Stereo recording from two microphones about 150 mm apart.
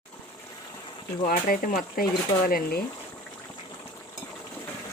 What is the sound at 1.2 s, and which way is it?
Speech, 70° left (ahead or behind).